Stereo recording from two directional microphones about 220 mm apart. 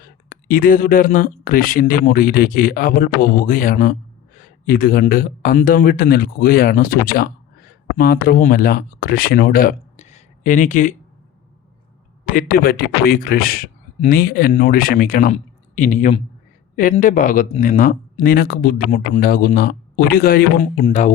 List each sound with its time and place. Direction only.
0.3 s speech: 40° left (ahead or behind)
12.2 s speech: 40° left (ahead or behind)